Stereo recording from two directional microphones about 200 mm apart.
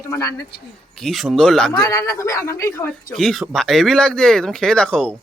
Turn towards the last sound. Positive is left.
turn(degrees=5)  # may be behind; listen again after turning